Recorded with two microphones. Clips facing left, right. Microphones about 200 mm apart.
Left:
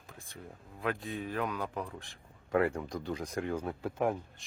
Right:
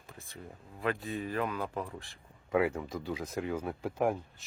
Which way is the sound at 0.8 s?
Centre (ahead or behind).